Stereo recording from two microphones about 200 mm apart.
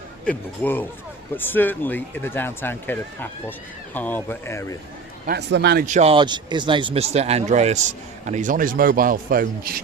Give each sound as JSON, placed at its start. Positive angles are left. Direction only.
{"t": 0.3, "sound": "speech", "side_deg": 10}
{"t": 5.2, "sound": "a man's voice", "side_deg": -55}
{"t": 5.8, "sound": "speech", "side_deg": -35}